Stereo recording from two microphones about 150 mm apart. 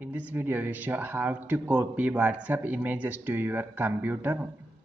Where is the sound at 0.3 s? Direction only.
15° right (ahead or behind).